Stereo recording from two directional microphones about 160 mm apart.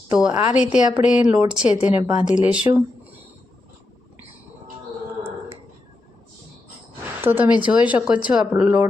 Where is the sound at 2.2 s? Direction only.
5° right (ahead or behind).